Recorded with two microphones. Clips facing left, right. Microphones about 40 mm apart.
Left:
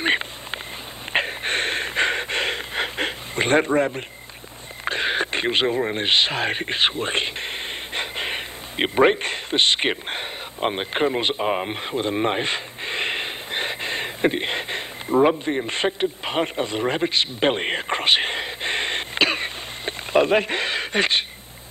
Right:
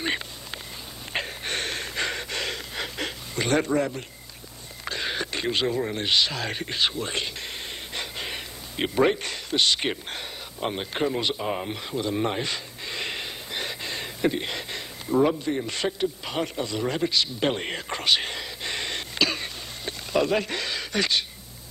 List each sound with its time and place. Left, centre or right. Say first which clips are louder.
0.0 s a sound: left 7 dB; left
1.1 s gasp: left 7 dB; left
4.8 s speech: left 7 dB; left